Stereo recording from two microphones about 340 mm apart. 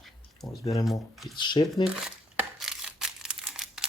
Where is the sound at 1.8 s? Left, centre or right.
Centre.